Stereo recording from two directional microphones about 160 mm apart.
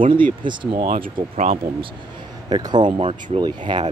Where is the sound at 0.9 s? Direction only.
60° right (ahead or behind).